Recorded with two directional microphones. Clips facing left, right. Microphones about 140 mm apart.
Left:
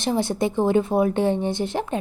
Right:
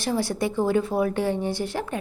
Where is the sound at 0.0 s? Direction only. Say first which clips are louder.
Left 3 dB; 20° left (ahead or behind).